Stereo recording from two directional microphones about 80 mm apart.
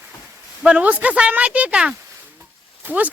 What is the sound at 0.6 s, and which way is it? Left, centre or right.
Speech, centre.